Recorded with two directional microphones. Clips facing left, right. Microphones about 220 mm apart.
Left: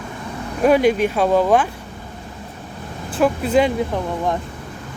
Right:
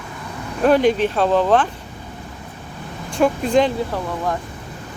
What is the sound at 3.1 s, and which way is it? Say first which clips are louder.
Speech: even; 5° left (ahead or behind).